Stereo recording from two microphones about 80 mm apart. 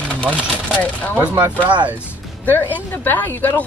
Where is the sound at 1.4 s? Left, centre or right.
Centre.